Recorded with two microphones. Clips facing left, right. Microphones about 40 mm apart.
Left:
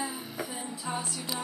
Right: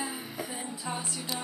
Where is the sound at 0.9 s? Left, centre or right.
Centre.